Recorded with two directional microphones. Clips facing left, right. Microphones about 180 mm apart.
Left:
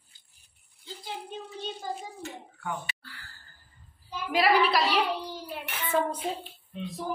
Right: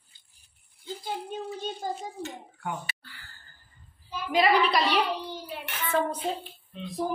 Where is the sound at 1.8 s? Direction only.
45° right (ahead or behind).